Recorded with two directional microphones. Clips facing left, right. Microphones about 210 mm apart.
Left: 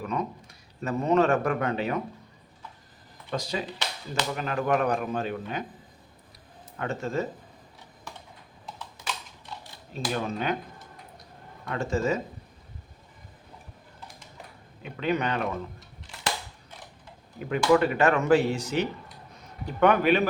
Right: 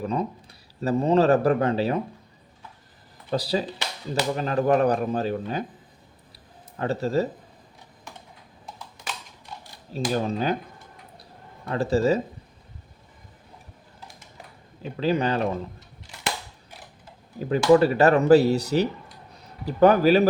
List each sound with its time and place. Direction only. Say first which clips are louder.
0.0 s speech: right 4 dB; 30° right (ahead or behind)
3.2 s speech: right 6 dB; 35° right (ahead or behind)
6.7 s speech: right 5 dB; 35° right (ahead or behind)
10.1 s speech: right 4 dB; 35° right (ahead or behind)
11.2 s a sound: right 2 dB; 30° right (ahead or behind)
14.8 s speech: right 4 dB; 30° right (ahead or behind)
17.4 s speech: right 5 dB; 35° right (ahead or behind)